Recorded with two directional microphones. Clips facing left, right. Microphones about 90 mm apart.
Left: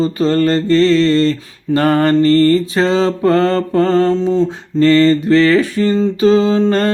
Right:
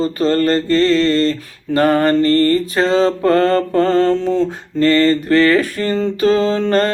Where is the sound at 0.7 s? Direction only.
40° right (ahead or behind).